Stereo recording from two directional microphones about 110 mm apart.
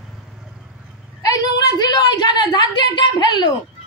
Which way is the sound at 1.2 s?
35° left (ahead or behind).